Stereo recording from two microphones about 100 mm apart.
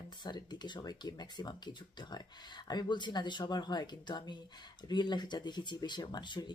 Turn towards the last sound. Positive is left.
turn(degrees=50)  # may be behind; listen again after turning